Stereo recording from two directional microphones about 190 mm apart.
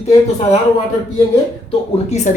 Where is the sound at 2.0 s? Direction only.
35° left (ahead or behind).